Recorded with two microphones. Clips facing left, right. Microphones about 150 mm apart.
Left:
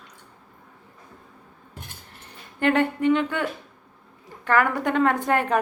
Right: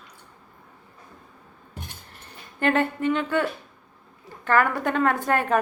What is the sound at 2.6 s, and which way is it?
A woman's voice, 20° left (ahead or behind).